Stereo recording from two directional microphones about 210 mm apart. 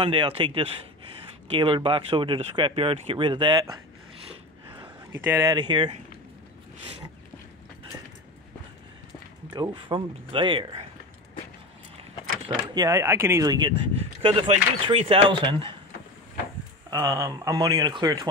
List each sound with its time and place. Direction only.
0.0 s speech: 25° right (ahead or behind)
4.8 s speech: 10° right (ahead or behind)
9.5 s speech: 20° right (ahead or behind)
12.4 s speech: 20° right (ahead or behind)
16.9 s speech: 15° right (ahead or behind)